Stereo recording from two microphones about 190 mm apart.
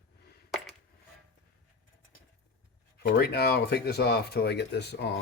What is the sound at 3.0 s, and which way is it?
Speech, 55° left (ahead or behind).